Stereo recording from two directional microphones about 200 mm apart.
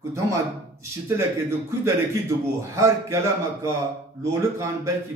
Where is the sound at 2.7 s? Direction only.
15° right (ahead or behind).